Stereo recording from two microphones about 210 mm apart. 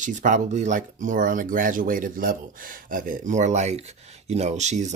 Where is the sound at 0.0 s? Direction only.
35° right (ahead or behind).